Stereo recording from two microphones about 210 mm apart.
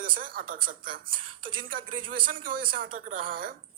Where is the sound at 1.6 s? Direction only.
40° right (ahead or behind).